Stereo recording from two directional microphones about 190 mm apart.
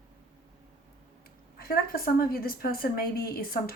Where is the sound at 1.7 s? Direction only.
50° left (ahead or behind).